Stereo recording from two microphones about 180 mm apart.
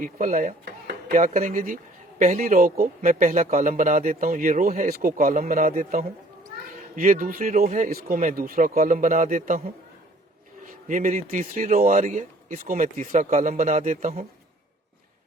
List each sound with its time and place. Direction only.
0.0 s speech: 45° right (ahead or behind)
1.1 s speech: 45° right (ahead or behind)
10.7 s speech: 50° right (ahead or behind)